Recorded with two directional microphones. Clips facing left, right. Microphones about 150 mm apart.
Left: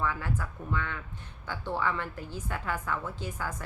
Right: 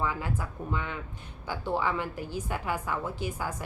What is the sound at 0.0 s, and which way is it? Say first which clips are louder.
A woman's voice: right 1 dB; 15° right (ahead or behind).